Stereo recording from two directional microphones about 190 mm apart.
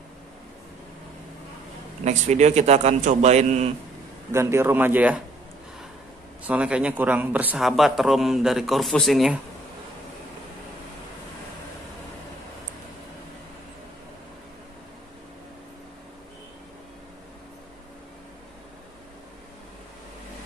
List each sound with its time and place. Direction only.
2.0 s a man's voice: 35° right (ahead or behind)
4.3 s a man's voice: 15° right (ahead or behind)
6.4 s speech: 5° right (ahead or behind)